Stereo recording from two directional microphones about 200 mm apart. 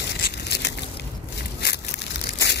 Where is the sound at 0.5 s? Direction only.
60° left (ahead or behind).